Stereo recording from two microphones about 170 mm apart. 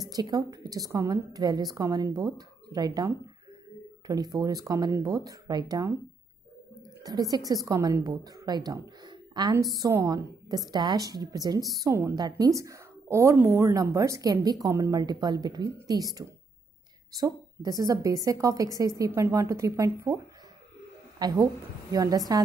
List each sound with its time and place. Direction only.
0.1 s a woman's voice: 25° right (ahead or behind)
7.0 s a woman's voice: 20° right (ahead or behind)
21.2 s a woman's voice: 25° right (ahead or behind)